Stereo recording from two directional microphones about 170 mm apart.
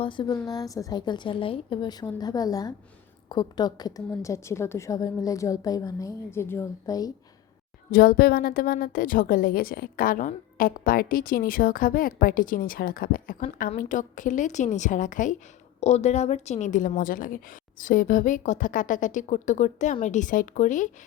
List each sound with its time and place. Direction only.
0.0 s a woman's voice: 30° left (ahead or behind)
7.9 s a woman's voice: 60° left (ahead or behind)